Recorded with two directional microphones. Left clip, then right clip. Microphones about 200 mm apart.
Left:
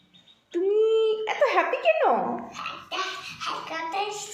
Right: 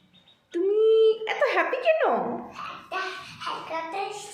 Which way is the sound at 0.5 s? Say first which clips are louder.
Right 1 dB; centre (ahead or behind).